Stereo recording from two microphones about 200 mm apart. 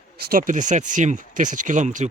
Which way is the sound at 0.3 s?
40° right (ahead or behind).